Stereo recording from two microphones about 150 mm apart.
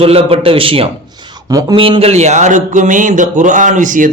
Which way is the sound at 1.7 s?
35° right (ahead or behind).